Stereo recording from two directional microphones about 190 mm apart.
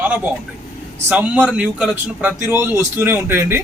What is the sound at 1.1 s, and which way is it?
A man's voice, 5° right (ahead or behind).